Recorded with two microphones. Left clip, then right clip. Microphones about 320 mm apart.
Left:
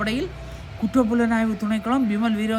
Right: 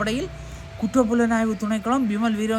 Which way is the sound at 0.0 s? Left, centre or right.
Centre.